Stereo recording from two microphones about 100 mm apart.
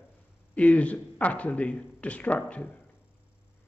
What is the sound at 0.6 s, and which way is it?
A man's voice, 15° left (ahead or behind).